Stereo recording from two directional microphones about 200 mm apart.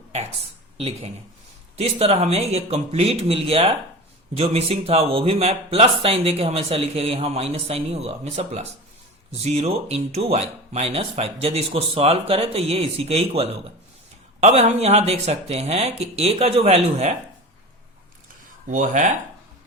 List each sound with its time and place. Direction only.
0.8 s speech: 30° right (ahead or behind)
18.7 s speech: 40° right (ahead or behind)